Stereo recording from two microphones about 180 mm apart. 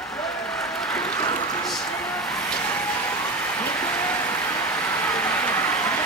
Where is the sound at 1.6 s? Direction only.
5° left (ahead or behind).